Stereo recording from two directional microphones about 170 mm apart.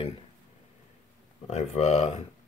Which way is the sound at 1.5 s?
40° left (ahead or behind).